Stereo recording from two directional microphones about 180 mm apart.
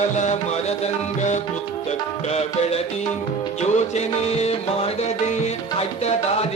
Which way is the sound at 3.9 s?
35° left (ahead or behind).